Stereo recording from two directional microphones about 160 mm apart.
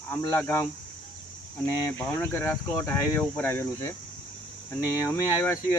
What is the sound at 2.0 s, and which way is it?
Speech, 15° left (ahead or behind).